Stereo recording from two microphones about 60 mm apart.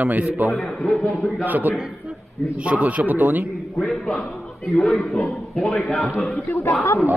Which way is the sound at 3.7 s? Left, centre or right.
Centre.